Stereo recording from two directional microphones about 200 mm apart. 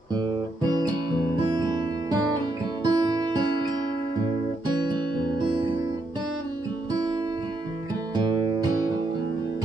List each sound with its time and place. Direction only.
0.1 s music: 20° right (ahead or behind)
4.7 s music: 20° right (ahead or behind)
6.9 s music: 20° right (ahead or behind)